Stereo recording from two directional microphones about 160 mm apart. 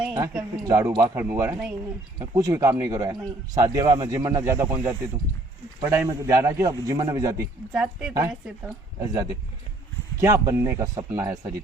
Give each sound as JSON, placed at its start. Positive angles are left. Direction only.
{"t": 0.6, "sound": "a man's voice", "side_deg": -20}
{"t": 7.7, "sound": "speech", "side_deg": -5}
{"t": 8.6, "sound": "a woman's voice", "side_deg": -20}